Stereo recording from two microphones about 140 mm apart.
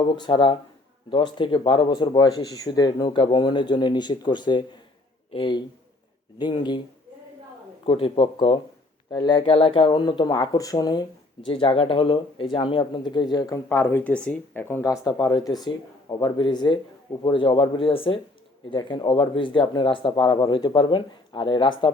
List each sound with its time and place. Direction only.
0.0 s speech: 35° left (ahead or behind)
7.9 s speech: 40° left (ahead or behind)
13.7 s speech: 15° left (ahead or behind); by 21.9 s 35° left (ahead or behind)